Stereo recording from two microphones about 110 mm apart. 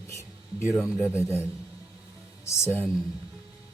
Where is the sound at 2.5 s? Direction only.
25° left (ahead or behind).